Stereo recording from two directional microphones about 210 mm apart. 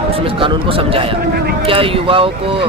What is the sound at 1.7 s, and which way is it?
Speech, 25° right (ahead or behind).